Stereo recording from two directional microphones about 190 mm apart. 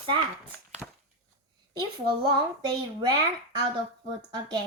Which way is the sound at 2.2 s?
25° right (ahead or behind).